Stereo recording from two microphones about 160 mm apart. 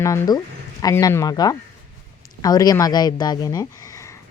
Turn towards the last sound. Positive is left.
turn(degrees=25)  # may be behind; listen again after turning